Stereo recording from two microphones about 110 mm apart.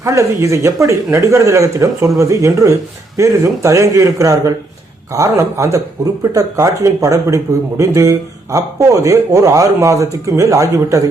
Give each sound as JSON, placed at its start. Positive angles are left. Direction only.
{"t": 0.0, "sound": "a man's voice", "side_deg": -25}